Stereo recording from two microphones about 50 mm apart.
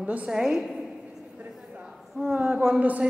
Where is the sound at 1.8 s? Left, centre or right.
Centre.